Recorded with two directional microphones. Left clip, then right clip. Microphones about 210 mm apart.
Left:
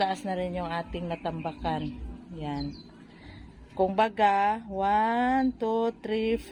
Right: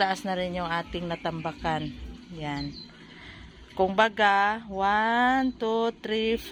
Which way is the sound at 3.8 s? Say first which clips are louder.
Right 1 dB; 5° left (ahead or behind).